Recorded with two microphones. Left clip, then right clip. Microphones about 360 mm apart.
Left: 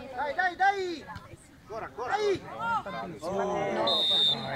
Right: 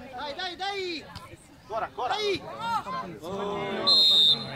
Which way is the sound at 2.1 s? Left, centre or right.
Left.